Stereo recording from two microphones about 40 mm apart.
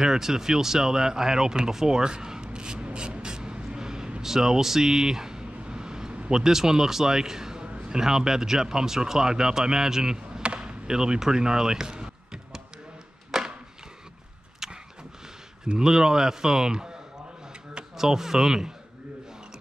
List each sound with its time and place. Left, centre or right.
0.0 s speech: centre
5.6 s vehicle: right
6.3 s speech: centre
7.7 s a sound: right
8.0 s speech: centre
10.4 s basketball bounce: right
13.3 s chop: centre
14.6 s a sound: centre
15.7 s speech: centre
17.9 s speech: centre